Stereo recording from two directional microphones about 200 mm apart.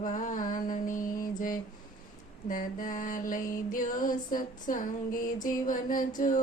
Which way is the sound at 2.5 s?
40° left (ahead or behind).